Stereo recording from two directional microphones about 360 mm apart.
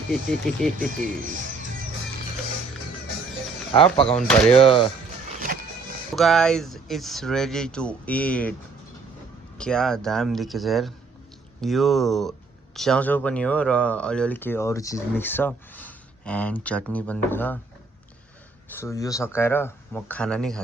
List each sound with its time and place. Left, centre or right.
0.1 s speech: centre
0.9 s speech: right
3.7 s speech: centre
5.3 s music: right
6.1 s speech: centre
9.6 s speech: centre
18.7 s speech: centre